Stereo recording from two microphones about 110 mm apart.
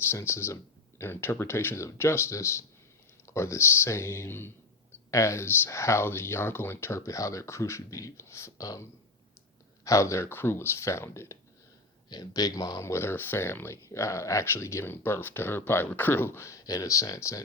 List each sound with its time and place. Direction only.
0.0 s speech: 25° left (ahead or behind)
9.8 s speech: 30° left (ahead or behind)
12.0 s speech: 35° left (ahead or behind)